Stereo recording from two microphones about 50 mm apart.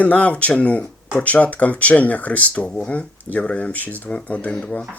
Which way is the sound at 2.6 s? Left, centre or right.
Centre.